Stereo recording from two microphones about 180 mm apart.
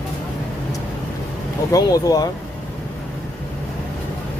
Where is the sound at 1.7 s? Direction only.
20° left (ahead or behind).